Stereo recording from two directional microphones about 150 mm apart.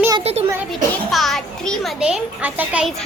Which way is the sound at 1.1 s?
Centre (ahead or behind).